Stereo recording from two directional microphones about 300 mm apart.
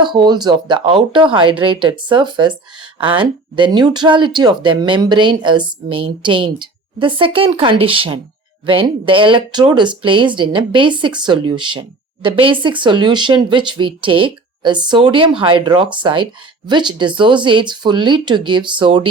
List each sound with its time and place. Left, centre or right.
0.0 s speech: centre